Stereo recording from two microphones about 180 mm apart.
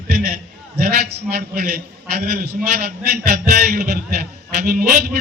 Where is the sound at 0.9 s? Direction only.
60° right (ahead or behind).